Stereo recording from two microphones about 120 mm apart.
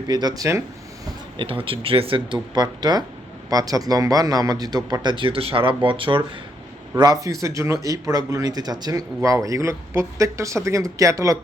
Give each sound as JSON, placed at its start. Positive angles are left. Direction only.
{"t": 0.1, "sound": "speech", "side_deg": -35}
{"t": 1.4, "sound": "speech", "side_deg": -50}
{"t": 6.9, "sound": "speech", "side_deg": -35}